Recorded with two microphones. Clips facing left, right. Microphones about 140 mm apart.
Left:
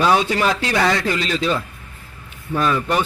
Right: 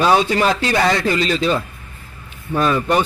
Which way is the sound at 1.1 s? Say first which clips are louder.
Right 3 dB; 30° right (ahead or behind).